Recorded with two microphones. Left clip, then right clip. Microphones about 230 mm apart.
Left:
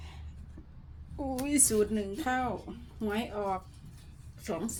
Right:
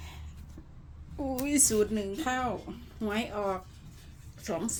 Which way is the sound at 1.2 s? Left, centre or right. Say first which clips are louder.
Right 2 dB; centre.